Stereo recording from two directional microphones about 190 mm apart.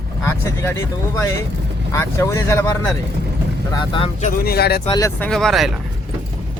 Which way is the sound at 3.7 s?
25° left (ahead or behind).